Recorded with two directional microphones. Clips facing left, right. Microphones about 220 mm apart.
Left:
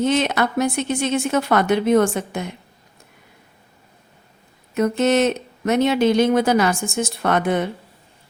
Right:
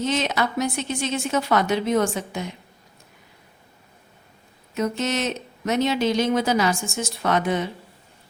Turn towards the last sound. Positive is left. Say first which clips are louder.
# left 3 dB
turn(degrees=55)  # may be behind; listen again after turning